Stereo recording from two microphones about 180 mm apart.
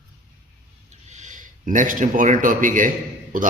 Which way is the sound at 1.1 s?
45° right (ahead or behind).